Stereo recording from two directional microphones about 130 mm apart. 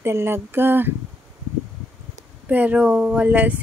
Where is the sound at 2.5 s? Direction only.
10° right (ahead or behind).